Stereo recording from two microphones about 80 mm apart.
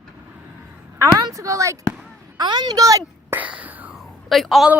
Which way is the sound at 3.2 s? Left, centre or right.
Centre.